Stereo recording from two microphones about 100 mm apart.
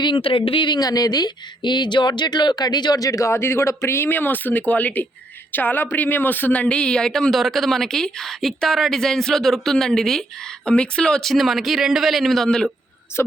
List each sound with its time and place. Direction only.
0.0 s speech: 60° left (ahead or behind); by 12.6 s 5° left (ahead or behind)
13.2 s speech: 25° left (ahead or behind)